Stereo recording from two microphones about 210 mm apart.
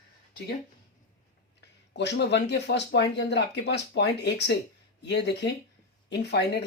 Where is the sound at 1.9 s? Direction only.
55° left (ahead or behind).